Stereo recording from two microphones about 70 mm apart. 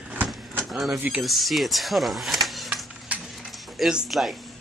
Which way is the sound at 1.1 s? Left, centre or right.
Centre.